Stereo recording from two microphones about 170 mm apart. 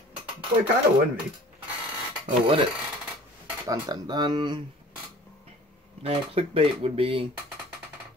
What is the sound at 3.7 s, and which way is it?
Speech, 25° right (ahead or behind).